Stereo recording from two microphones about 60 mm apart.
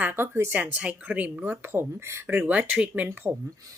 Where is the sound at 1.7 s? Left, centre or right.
Right.